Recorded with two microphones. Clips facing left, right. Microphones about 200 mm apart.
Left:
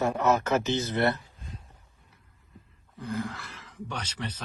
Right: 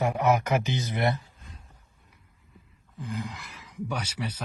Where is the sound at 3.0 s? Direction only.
20° right (ahead or behind).